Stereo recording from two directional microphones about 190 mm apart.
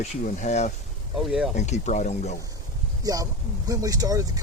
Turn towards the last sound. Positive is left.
turn(degrees=-20)  # may be behind; listen again after turning